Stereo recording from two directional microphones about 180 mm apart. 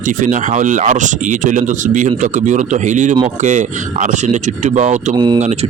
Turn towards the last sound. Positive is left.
turn(degrees=-40)  # may be behind; listen again after turning